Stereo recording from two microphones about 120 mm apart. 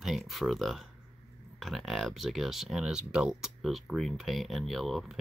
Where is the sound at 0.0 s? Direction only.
Centre (ahead or behind).